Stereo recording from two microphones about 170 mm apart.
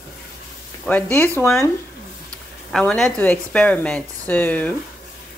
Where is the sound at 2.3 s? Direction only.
5° left (ahead or behind).